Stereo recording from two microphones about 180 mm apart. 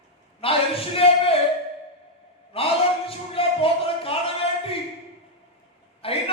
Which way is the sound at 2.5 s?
30° left (ahead or behind).